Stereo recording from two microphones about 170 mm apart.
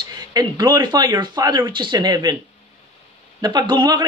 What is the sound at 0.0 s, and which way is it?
A man's voice, 25° right (ahead or behind).